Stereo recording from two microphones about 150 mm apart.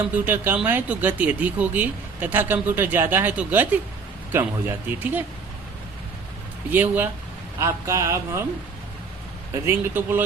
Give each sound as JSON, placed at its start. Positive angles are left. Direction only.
{"t": 0.0, "sound": "speech", "side_deg": -10}
{"t": 6.7, "sound": "speech", "side_deg": -10}
{"t": 9.6, "sound": "speech", "side_deg": -15}